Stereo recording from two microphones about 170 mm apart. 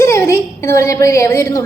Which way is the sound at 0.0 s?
15° left (ahead or behind).